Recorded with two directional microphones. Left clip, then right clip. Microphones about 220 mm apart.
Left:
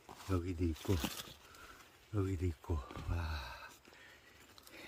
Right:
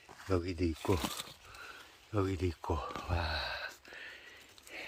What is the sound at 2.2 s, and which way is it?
Speech, 5° right (ahead or behind).